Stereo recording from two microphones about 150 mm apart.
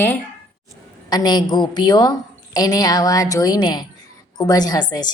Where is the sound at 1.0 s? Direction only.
25° left (ahead or behind).